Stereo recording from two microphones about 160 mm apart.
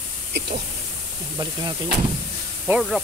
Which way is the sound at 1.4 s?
25° right (ahead or behind).